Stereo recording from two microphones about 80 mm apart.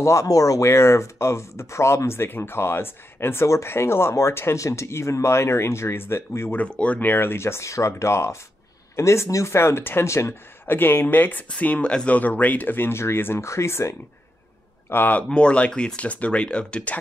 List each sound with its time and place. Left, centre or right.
0.0 s speech: left
6.6 s speech: centre; by 13.9 s left
14.9 s speech: left
15.2 s speech: centre